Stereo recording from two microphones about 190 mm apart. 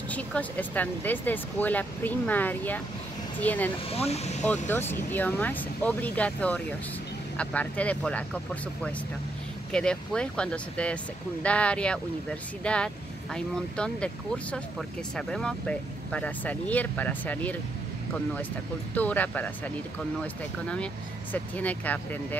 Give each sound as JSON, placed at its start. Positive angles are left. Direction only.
{"t": 0.1, "sound": "speech", "side_deg": 10}
{"t": 3.9, "sound": "speech", "side_deg": 35}
{"t": 4.5, "sound": "speech", "side_deg": 10}
{"t": 9.7, "sound": "speech", "side_deg": 5}